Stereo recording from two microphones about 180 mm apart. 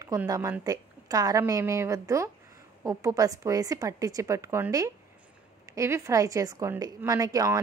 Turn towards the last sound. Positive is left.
turn(degrees=-20)  # may be behind; listen again after turning